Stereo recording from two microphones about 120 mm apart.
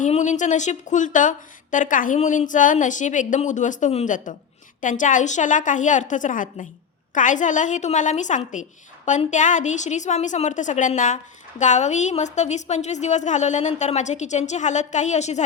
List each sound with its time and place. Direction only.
0.0 s a woman's voice: 85° left
11.6 s a woman's voice: 80° left